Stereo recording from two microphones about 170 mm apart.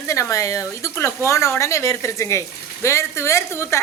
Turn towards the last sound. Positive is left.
turn(degrees=15)  # may be behind; listen again after turning